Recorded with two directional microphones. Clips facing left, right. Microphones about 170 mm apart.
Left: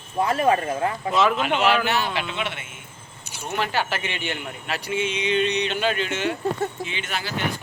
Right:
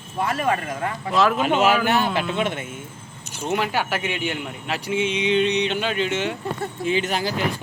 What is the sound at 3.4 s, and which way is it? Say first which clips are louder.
A man's voice: right 2 dB; 15° right (ahead or behind).